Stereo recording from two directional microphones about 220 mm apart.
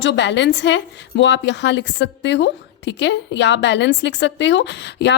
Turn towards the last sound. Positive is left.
turn(degrees=50)  # may be behind; listen again after turning